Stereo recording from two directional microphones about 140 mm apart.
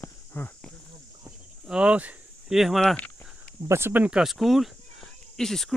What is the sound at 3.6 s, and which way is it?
Speech, 15° right (ahead or behind).